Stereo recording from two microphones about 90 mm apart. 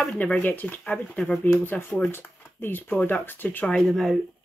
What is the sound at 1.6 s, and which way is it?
Speech, 20° left (ahead or behind).